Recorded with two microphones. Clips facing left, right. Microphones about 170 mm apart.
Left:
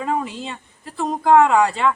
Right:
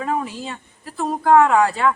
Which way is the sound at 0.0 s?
Centre (ahead or behind).